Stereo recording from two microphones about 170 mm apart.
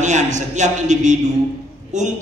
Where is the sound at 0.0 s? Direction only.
45° right (ahead or behind).